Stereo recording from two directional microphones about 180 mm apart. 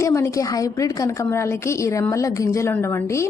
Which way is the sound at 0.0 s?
15° left (ahead or behind).